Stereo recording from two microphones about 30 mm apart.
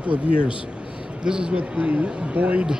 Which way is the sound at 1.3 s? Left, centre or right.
Right.